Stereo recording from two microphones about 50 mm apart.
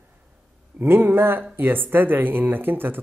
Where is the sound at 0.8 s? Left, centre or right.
Right.